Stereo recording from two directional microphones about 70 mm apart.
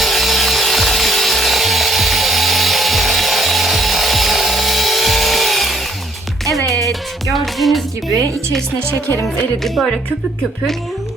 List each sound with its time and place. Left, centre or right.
0.0 s wood: centre
6.7 s music: right
7.3 s music: centre
9.6 s speech: centre